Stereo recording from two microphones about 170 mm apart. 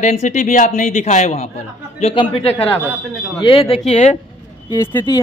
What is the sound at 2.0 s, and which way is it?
A man's voice, 30° left (ahead or behind).